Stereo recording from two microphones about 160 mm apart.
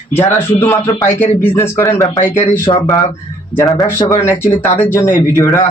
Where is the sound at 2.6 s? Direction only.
35° left (ahead or behind).